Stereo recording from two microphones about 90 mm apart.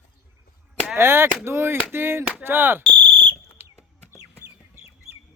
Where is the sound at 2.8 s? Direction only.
15° left (ahead or behind).